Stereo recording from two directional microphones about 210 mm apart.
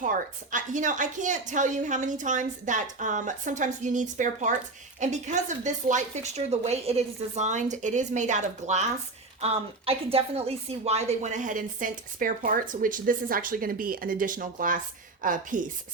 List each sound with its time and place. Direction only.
0.0 s a woman's voice: 35° right (ahead or behind)